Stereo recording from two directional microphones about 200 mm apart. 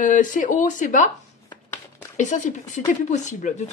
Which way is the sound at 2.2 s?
40° left (ahead or behind).